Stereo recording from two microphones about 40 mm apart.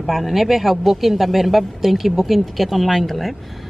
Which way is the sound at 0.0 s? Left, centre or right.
Centre.